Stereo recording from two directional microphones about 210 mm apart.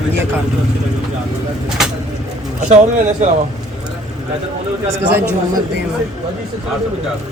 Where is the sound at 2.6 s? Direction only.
35° right (ahead or behind).